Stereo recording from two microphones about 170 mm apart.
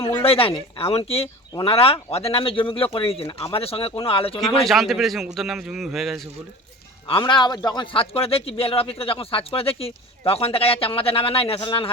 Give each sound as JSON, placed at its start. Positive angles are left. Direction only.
{"t": 0.2, "sound": "speech", "side_deg": 35}
{"t": 4.4, "sound": "a man's voice", "side_deg": 0}
{"t": 7.1, "sound": "speech", "side_deg": 30}